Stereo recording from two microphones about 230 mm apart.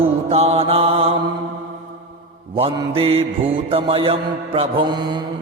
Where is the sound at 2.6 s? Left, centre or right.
Right.